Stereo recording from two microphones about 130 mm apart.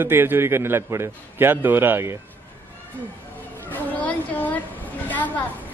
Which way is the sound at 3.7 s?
10° left (ahead or behind).